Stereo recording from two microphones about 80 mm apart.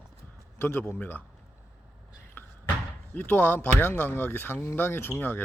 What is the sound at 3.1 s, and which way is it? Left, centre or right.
Speech, left.